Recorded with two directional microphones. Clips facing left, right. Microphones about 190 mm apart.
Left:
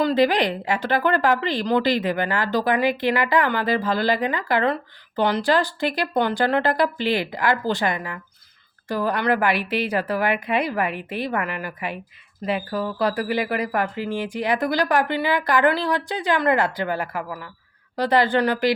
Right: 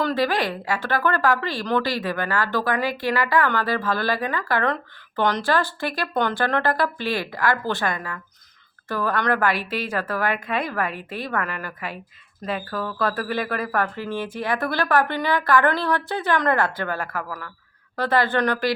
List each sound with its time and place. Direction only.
0.0 s a woman's voice: 20° left (ahead or behind)